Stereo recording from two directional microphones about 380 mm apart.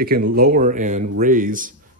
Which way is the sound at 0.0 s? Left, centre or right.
Right.